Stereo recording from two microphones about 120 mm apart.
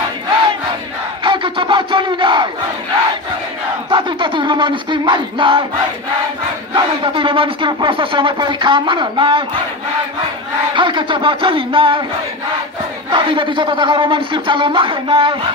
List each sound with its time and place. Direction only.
1.2 s battle cry: 40° right (ahead or behind)
3.9 s a sound: 40° right (ahead or behind)
6.7 s speech: 45° right (ahead or behind)
10.7 s speech: 45° right (ahead or behind)
13.1 s speech: 45° right (ahead or behind)